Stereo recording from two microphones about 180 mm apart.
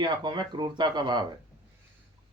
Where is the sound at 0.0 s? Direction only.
25° right (ahead or behind).